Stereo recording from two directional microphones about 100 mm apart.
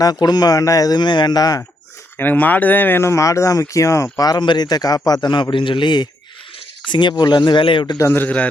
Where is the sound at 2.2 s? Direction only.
15° left (ahead or behind).